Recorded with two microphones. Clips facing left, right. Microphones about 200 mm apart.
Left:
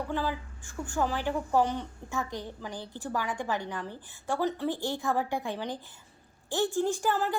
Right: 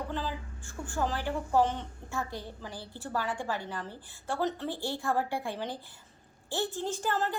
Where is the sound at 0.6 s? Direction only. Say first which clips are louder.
Left 2 dB; 15° left (ahead or behind).